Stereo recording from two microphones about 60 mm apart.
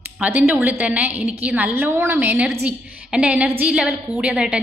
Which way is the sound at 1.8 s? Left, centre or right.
Right.